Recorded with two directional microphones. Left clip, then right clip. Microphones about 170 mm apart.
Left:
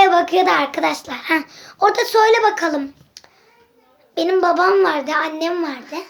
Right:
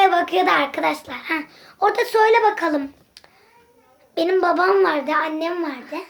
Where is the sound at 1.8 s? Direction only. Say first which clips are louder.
Left 3 dB; 25° left (ahead or behind).